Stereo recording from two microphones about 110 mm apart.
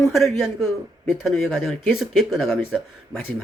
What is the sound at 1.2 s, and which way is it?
Speech, 5° left (ahead or behind).